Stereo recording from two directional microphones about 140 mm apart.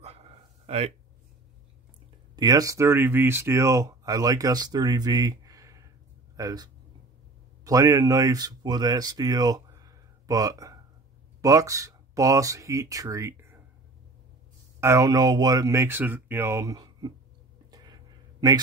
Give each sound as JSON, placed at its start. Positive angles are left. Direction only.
{"t": 0.7, "sound": "speech", "side_deg": -45}
{"t": 2.3, "sound": "speech", "side_deg": -30}
{"t": 14.8, "sound": "speech", "side_deg": -20}
{"t": 17.6, "sound": "a sound", "side_deg": -30}